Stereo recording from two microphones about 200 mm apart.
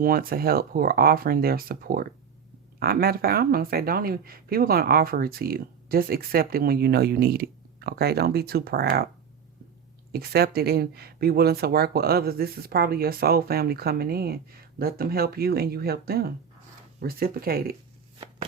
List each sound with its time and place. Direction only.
0.0 s speech: 50° right (ahead or behind)
10.1 s speech: 50° right (ahead or behind)